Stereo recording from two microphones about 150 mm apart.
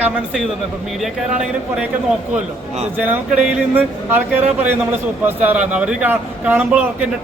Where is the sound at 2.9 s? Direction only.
10° right (ahead or behind).